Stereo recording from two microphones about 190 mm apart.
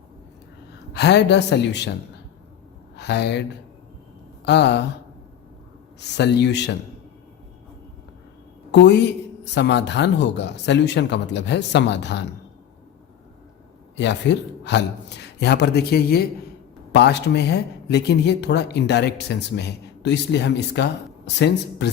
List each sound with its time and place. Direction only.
0.9 s speech: 65° left (ahead or behind)
2.9 s speech: 65° left (ahead or behind)
4.4 s speech: 65° left (ahead or behind)
6.0 s speech: 65° left (ahead or behind)
8.7 s speech: 70° left (ahead or behind)
13.9 s speech: 65° left (ahead or behind)